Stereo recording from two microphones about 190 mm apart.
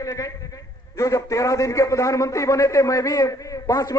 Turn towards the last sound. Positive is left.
turn(degrees=20)  # may be behind; listen again after turning